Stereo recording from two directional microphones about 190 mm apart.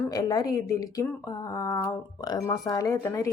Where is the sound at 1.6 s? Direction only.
15° left (ahead or behind).